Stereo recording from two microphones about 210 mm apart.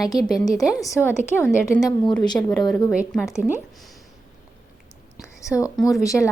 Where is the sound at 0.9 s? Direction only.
10° left (ahead or behind).